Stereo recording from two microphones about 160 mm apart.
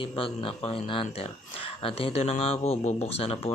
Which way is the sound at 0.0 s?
35° left (ahead or behind).